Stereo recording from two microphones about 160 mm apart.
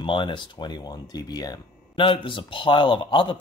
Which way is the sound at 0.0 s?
30° left (ahead or behind).